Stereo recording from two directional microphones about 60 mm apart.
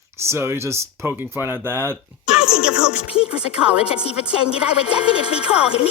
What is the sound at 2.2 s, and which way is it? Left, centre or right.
Speech, centre.